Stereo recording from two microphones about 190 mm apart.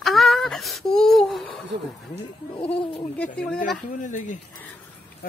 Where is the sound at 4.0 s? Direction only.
40° left (ahead or behind).